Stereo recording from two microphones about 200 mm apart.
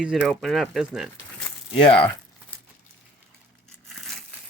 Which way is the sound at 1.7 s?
25° left (ahead or behind).